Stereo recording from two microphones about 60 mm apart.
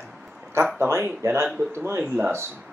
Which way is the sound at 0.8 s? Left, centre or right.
Right.